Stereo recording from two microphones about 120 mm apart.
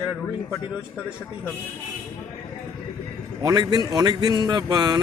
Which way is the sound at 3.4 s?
35° right (ahead or behind).